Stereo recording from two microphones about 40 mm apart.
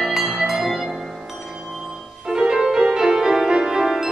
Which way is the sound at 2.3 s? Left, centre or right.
Centre.